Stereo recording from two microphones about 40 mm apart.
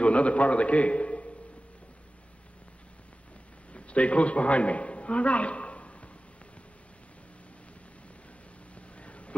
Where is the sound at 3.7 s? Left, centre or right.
Left.